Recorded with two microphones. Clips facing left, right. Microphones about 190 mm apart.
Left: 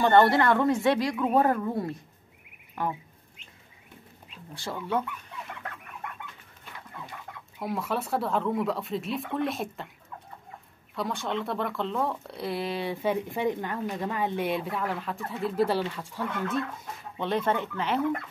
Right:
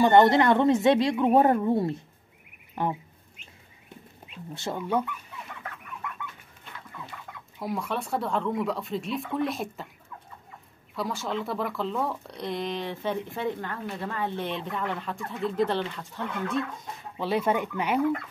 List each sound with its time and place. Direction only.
0.0 s speech: 15° right (ahead or behind)
2.7 s a sound: 25° right (ahead or behind)
4.6 s speech: 20° right (ahead or behind)
7.5 s speech: centre (ahead or behind)
11.0 s speech: centre (ahead or behind)
17.2 s speech: 5° right (ahead or behind)